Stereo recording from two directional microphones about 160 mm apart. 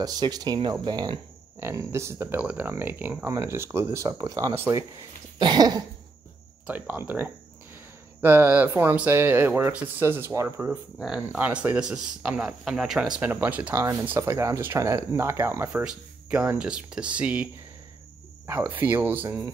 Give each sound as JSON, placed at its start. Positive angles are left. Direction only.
{"t": 0.0, "sound": "speech", "side_deg": -25}
{"t": 1.6, "sound": "speech", "side_deg": -15}
{"t": 6.6, "sound": "speech", "side_deg": -10}
{"t": 11.0, "sound": "speech", "side_deg": -5}
{"t": 15.8, "sound": "speech", "side_deg": -5}
{"t": 18.5, "sound": "speech", "side_deg": -10}